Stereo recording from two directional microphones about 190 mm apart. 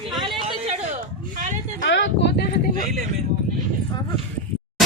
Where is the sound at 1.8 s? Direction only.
70° left (ahead or behind).